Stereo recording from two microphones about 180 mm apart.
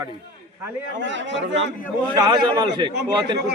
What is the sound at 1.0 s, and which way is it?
Speech, 85° right.